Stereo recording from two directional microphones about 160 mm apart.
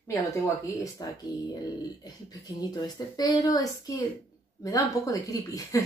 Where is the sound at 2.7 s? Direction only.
25° left (ahead or behind).